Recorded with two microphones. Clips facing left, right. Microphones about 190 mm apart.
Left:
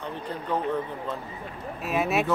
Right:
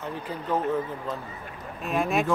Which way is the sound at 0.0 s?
5° right (ahead or behind).